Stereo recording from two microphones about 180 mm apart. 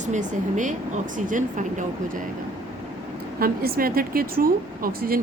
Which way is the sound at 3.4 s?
55° right (ahead or behind).